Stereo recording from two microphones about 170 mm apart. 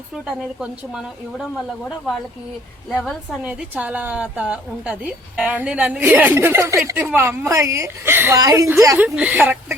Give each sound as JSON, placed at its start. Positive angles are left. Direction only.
{"t": 0.3, "sound": "speech", "side_deg": -5}
{"t": 2.9, "sound": "a woman's voice", "side_deg": 0}